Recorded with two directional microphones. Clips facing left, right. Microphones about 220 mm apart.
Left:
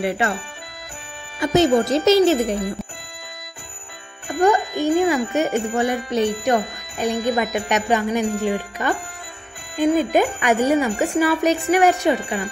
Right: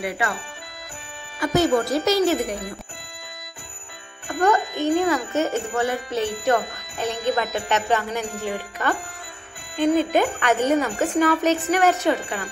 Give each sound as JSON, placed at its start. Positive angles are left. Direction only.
{"t": 1.4, "sound": "speech", "side_deg": 20}
{"t": 4.3, "sound": "speech", "side_deg": 10}